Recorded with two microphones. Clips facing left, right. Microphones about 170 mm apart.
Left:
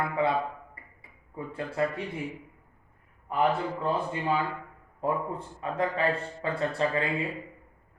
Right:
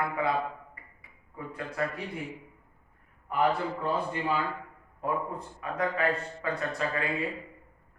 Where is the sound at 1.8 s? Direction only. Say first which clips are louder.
Left 4 dB; 25° left (ahead or behind).